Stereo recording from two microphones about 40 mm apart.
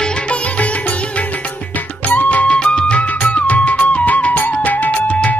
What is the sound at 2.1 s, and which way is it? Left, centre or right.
Music, left.